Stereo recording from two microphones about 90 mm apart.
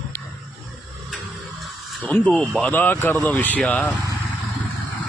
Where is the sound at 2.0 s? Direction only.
20° left (ahead or behind).